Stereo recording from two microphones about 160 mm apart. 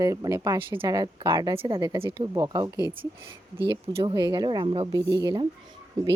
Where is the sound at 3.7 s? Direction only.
30° right (ahead or behind).